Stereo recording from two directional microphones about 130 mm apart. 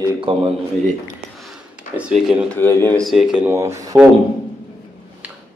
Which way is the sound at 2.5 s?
20° left (ahead or behind).